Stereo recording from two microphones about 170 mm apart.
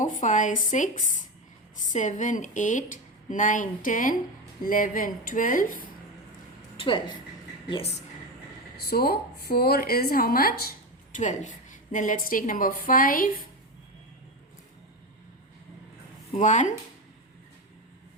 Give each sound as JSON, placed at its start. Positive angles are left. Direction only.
{"t": 0.0, "sound": "speech", "side_deg": 45}
{"t": 6.7, "sound": "a woman's voice", "side_deg": 30}
{"t": 8.8, "sound": "a woman's voice", "side_deg": 65}
{"t": 11.1, "sound": "speech", "side_deg": 45}
{"t": 16.3, "sound": "speech", "side_deg": 45}